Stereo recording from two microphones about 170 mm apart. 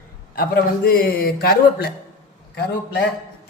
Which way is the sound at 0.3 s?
60° left (ahead or behind).